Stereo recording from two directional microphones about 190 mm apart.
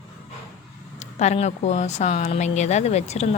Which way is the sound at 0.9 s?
35° left (ahead or behind).